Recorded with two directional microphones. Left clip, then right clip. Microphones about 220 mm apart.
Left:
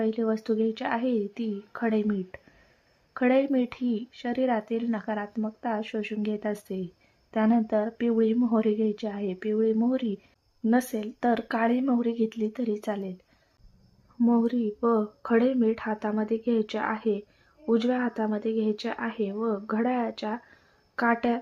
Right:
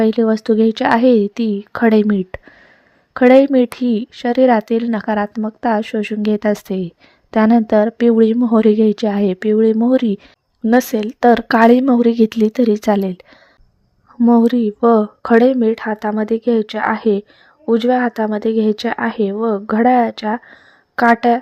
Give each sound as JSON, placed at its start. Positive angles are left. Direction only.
{"t": 0.0, "sound": "speech", "side_deg": -40}
{"t": 14.2, "sound": "speech", "side_deg": -40}